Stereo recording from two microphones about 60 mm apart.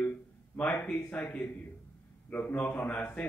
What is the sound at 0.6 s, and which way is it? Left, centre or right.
Speech, centre.